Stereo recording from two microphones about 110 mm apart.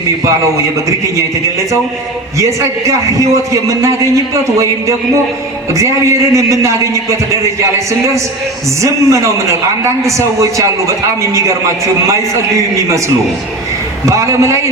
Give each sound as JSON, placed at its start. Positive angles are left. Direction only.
{"t": 2.4, "sound": "a man's voice", "side_deg": -30}
{"t": 14.0, "sound": "a man's voice", "side_deg": -30}